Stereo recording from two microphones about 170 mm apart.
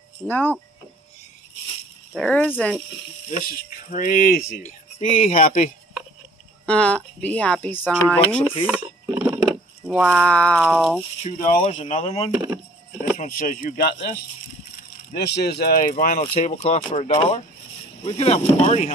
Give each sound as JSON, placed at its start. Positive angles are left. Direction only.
{"t": 0.3, "sound": "speech", "side_deg": 10}
{"t": 2.1, "sound": "speech", "side_deg": 10}
{"t": 3.3, "sound": "speech", "side_deg": 50}
{"t": 6.6, "sound": "speech", "side_deg": 5}
{"t": 8.6, "sound": "a sound", "side_deg": -5}
{"t": 9.8, "sound": "speech", "side_deg": 0}
{"t": 11.3, "sound": "speech", "side_deg": 55}
{"t": 11.6, "sound": "speech", "side_deg": 40}
{"t": 12.4, "sound": "a sound", "side_deg": -10}
{"t": 13.3, "sound": "speech", "side_deg": 55}
{"t": 15.1, "sound": "speech", "side_deg": 75}
{"t": 16.2, "sound": "speech", "side_deg": 40}